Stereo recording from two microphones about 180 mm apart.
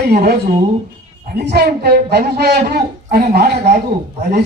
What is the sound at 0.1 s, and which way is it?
A man's voice, 60° right (ahead or behind).